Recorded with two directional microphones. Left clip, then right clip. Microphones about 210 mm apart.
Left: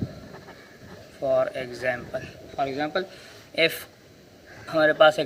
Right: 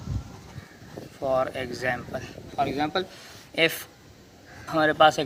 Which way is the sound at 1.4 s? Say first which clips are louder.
Left 1 dB; 50° right (ahead or behind).